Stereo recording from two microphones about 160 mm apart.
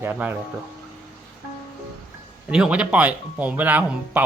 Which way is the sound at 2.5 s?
5° right (ahead or behind).